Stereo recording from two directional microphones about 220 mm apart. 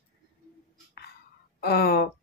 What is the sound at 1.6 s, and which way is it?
Speech, 45° left (ahead or behind).